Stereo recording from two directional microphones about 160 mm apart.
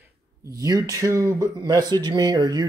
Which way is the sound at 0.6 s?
20° right (ahead or behind).